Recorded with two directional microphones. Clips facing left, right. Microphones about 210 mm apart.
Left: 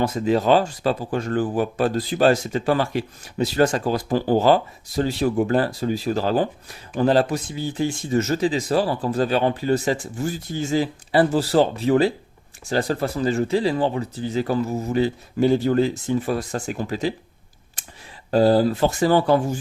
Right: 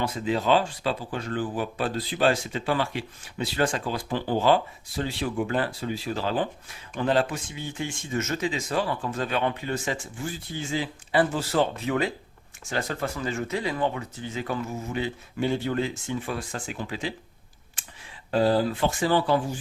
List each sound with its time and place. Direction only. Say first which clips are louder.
0.0 s speech: left 6 dB; 45° left (ahead or behind)
18.3 s speech: left 6 dB; 40° left (ahead or behind)